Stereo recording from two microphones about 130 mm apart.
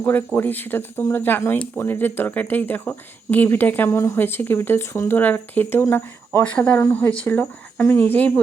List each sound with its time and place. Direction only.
0.0 s speech: 15° left (ahead or behind)